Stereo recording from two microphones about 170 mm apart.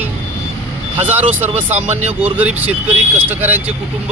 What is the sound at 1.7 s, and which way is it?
Speech, 40° right (ahead or behind).